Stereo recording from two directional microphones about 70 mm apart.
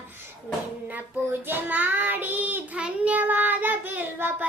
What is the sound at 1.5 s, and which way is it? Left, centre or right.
A child's voice, right.